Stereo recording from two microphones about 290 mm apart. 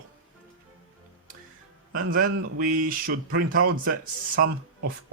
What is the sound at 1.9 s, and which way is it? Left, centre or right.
Speech, right.